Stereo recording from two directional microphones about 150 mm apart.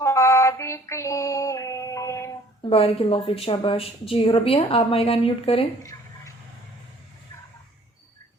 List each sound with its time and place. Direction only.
0.0 s female singing: 20° left (ahead or behind)
2.6 s a woman's voice: 40° left (ahead or behind)
5.8 s a sound: 20° left (ahead or behind)